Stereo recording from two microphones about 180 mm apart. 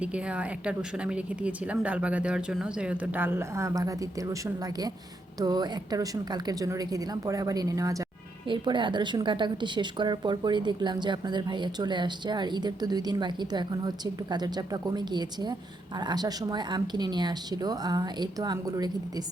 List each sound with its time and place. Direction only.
0.0 s a woman's voice: 5° right (ahead or behind)